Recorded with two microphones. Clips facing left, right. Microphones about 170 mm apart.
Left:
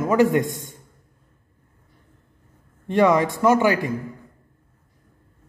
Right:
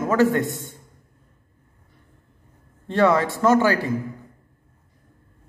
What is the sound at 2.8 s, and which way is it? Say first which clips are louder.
A man's voice: left 1 dB; 15° left (ahead or behind).